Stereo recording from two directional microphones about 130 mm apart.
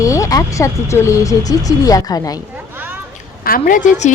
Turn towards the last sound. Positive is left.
turn(degrees=75)  # may be behind; listen again after turning